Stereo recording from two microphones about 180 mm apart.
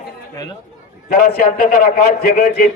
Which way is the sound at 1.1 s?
60° left (ahead or behind).